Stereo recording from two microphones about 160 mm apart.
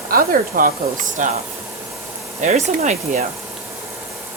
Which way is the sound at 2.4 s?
50° right (ahead or behind).